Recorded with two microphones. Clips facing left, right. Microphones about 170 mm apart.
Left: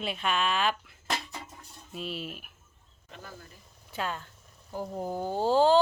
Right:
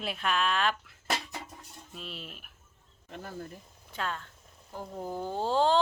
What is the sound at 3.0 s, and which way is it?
Speech, 50° right (ahead or behind).